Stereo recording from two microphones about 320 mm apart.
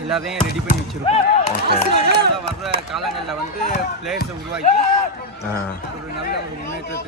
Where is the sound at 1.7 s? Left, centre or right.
Right.